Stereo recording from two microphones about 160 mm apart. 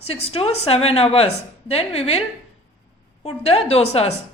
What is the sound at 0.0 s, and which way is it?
A woman's voice, 40° left (ahead or behind).